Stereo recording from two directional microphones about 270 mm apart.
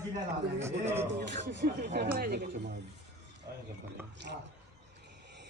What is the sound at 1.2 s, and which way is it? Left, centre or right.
Speech, right.